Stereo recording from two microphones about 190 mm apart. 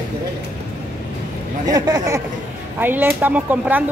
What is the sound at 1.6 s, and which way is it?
Speech, 20° right (ahead or behind).